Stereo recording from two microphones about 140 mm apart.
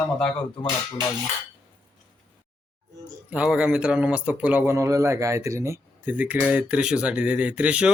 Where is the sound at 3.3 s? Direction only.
5° right (ahead or behind).